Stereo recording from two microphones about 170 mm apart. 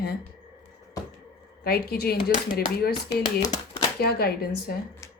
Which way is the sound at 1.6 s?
65° left (ahead or behind).